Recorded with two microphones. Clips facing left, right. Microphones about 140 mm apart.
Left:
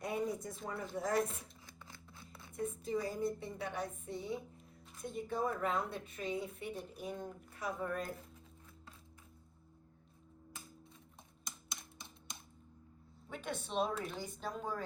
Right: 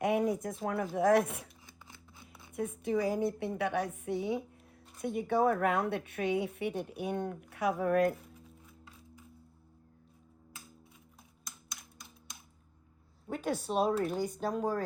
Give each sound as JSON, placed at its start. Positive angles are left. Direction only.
{"t": 0.0, "sound": "a woman's voice", "side_deg": -90}
{"t": 1.6, "sound": "scissors", "side_deg": 0}
{"t": 2.6, "sound": "a woman's voice", "side_deg": -90}
{"t": 5.0, "sound": "speech", "side_deg": -70}
{"t": 8.1, "sound": "a sound", "side_deg": 0}
{"t": 11.4, "sound": "typing", "side_deg": 0}
{"t": 13.2, "sound": "a sound", "side_deg": -45}
{"t": 13.7, "sound": "speech", "side_deg": -45}